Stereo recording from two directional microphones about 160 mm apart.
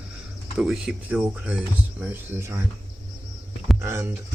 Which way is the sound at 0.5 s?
5° right (ahead or behind).